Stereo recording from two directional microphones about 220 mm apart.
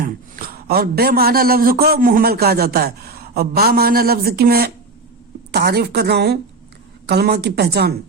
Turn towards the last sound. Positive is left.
turn(degrees=-45)  # may be behind; listen again after turning